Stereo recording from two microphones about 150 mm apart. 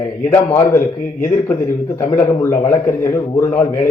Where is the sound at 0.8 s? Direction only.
60° left (ahead or behind).